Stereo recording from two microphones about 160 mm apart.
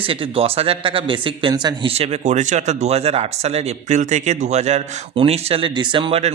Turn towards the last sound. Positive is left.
turn(degrees=-40)  # may be behind; listen again after turning